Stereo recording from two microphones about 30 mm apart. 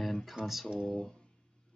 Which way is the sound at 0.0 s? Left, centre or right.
Centre.